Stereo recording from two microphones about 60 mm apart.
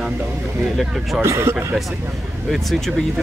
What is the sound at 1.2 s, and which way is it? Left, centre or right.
Speech, right.